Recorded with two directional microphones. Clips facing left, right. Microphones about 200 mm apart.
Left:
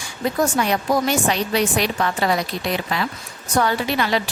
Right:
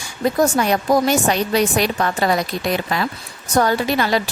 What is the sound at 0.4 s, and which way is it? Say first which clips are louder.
A woman's voice: right 2 dB; 40° right (ahead or behind).